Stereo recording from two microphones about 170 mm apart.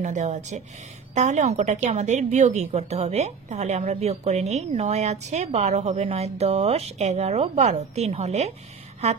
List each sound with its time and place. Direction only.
0.0 s speech: 45° right (ahead or behind)